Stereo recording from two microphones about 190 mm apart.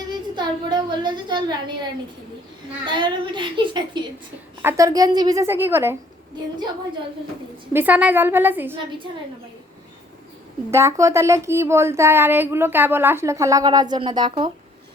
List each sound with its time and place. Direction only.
0.3 s a sound: 25° right (ahead or behind)
2.8 s a woman's voice: 25° right (ahead or behind)
7.7 s speech: 10° right (ahead or behind)
10.7 s speech: 15° right (ahead or behind)